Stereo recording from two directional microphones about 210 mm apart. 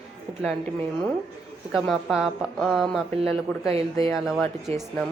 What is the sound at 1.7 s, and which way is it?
Speech, centre (ahead or behind).